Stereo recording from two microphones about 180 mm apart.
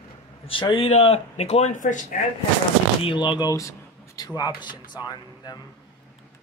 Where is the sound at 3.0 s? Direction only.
25° left (ahead or behind).